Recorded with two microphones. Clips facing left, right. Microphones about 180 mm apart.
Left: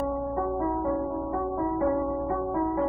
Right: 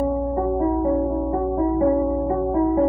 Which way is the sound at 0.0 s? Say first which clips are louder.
Right 6 dB; 30° right (ahead or behind).